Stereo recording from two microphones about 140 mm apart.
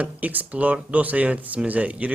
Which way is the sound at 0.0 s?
10° right (ahead or behind).